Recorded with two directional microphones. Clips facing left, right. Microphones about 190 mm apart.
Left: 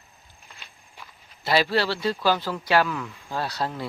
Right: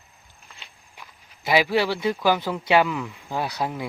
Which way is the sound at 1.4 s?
15° right (ahead or behind).